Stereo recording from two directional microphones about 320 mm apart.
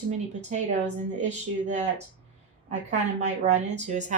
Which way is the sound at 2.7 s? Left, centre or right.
Right.